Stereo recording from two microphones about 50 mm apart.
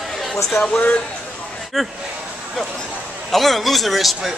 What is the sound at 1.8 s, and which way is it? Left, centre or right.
Speech, centre.